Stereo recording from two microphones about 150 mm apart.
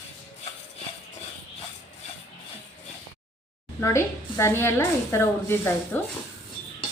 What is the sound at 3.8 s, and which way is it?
Speech, 20° left (ahead or behind).